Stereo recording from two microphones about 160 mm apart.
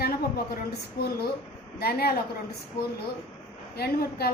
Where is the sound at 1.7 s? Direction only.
75° left (ahead or behind).